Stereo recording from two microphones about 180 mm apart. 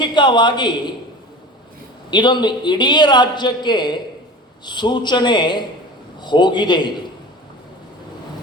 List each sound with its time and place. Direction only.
0.0 s a man's voice: 25° left (ahead or behind)
2.0 s a man's voice: 25° left (ahead or behind)